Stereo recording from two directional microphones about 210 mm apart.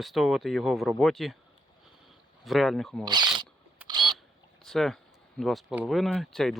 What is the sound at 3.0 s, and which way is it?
Speech, 20° right (ahead or behind).